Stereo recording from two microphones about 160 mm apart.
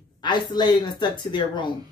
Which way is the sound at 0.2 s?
30° left (ahead or behind).